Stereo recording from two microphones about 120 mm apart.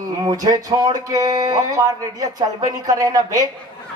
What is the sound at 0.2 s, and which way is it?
Speech, 30° right (ahead or behind).